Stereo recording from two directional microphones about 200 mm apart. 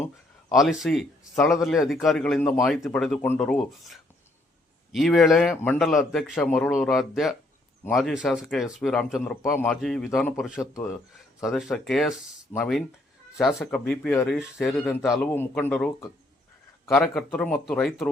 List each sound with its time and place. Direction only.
0.5 s a man's voice: centre (ahead or behind)
10.6 s speech: 15° left (ahead or behind)
11.4 s a man's voice: centre (ahead or behind)